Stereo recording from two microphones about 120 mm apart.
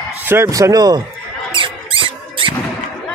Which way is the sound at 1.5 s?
45° right (ahead or behind).